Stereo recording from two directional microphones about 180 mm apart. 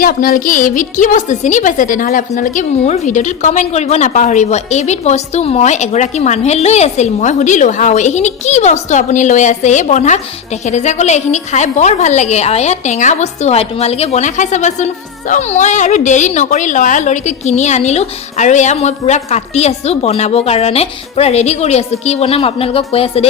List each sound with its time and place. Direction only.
0.0 s a woman's voice: 55° left (ahead or behind); by 23.2 s 35° left (ahead or behind)